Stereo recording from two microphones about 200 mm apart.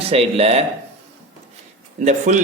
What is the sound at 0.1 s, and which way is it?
Speech, 30° right (ahead or behind).